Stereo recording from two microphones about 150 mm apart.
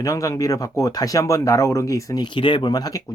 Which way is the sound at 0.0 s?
20° left (ahead or behind).